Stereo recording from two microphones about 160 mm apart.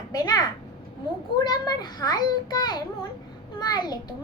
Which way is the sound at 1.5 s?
25° left (ahead or behind).